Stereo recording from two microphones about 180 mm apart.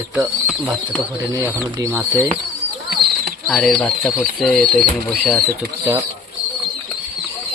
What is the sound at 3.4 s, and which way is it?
Speech, centre (ahead or behind).